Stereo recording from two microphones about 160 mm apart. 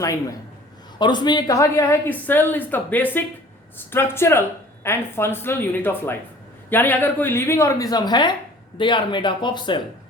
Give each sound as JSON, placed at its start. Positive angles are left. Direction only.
{"t": 0.0, "sound": "speech", "side_deg": 20}